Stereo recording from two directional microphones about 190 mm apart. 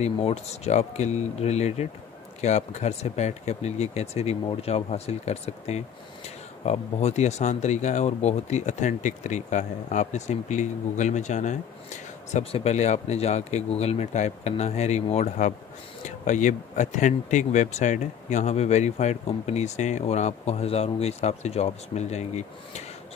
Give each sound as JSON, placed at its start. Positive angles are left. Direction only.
{"t": 0.0, "sound": "speech", "side_deg": 35}